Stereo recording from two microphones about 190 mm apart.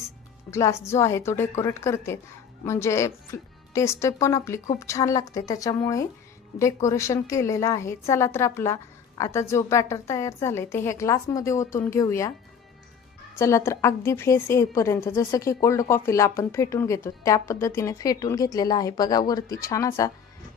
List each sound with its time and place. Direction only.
0.5 s a woman's voice: 15° left (ahead or behind)
13.4 s a woman's voice: 15° left (ahead or behind)